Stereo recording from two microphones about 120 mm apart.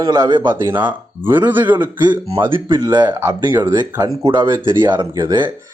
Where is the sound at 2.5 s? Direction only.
40° right (ahead or behind).